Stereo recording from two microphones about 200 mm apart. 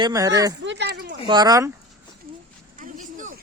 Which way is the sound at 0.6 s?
60° right (ahead or behind).